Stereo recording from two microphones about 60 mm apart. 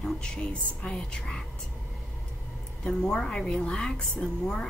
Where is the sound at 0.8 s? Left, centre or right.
Centre.